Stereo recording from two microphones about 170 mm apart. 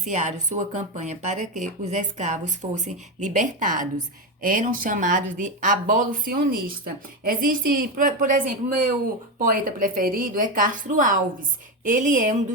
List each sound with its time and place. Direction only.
0.0 s speech: 45° right (ahead or behind)
9.4 s speech: 55° right (ahead or behind)